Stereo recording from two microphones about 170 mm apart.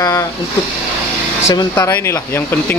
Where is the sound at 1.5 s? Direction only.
15° left (ahead or behind).